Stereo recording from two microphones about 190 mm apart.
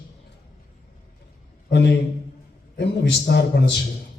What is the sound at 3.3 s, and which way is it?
Speech, 55° left (ahead or behind).